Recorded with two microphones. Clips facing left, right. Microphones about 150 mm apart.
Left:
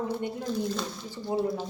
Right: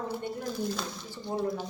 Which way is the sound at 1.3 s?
10° left (ahead or behind).